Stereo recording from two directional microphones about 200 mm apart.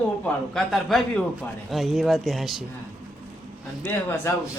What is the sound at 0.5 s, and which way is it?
Speech, centre (ahead or behind).